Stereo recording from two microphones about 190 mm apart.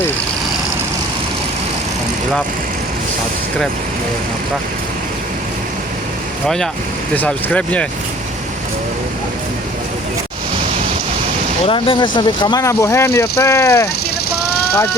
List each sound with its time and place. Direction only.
7.2 s speech: 10° left (ahead or behind)
11.6 s speech: 25° left (ahead or behind)